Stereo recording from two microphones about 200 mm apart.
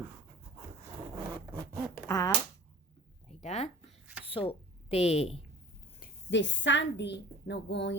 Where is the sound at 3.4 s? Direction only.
35° left (ahead or behind).